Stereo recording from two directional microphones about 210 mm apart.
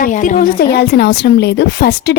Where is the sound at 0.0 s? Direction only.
40° left (ahead or behind).